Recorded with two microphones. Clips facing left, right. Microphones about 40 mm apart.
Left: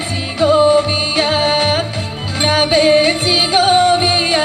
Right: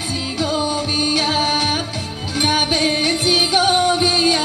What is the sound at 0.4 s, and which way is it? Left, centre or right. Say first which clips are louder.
Music: left 11 dB; left.